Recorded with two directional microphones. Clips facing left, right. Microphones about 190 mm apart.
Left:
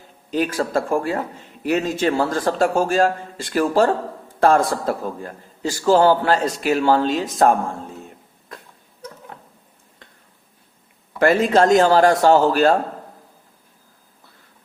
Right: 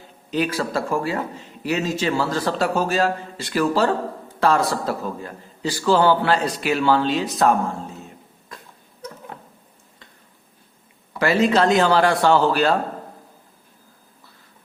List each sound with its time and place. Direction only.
0.3 s a man's voice: 45° left (ahead or behind)
11.2 s a man's voice: 50° left (ahead or behind)